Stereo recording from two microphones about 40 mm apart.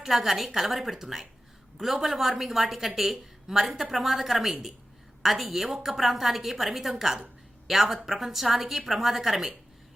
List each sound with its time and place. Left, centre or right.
0.0 s a woman's voice: centre